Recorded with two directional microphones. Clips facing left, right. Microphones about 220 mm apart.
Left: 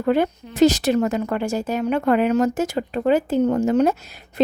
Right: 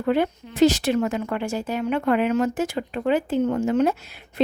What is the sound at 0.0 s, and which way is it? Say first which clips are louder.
Speech: left 2 dB; 45° left (ahead or behind).